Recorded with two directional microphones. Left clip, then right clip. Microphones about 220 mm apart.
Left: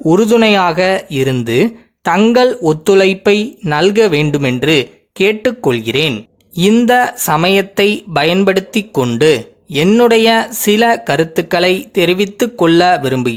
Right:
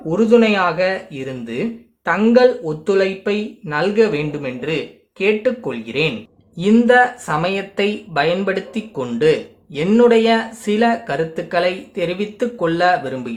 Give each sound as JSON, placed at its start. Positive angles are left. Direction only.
{"t": 0.0, "sound": "speech", "side_deg": 50}